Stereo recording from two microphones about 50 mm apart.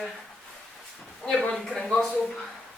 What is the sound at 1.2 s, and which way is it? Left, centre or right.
Speech, left.